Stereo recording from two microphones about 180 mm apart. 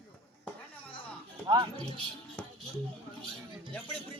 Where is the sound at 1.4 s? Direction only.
25° right (ahead or behind).